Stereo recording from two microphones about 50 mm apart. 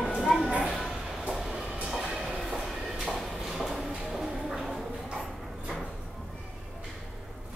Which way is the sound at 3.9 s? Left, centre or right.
Centre.